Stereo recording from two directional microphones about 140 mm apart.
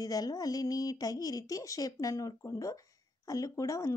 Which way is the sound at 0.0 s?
25° left (ahead or behind).